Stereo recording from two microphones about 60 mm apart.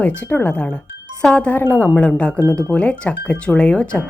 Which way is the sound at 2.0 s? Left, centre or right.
Left.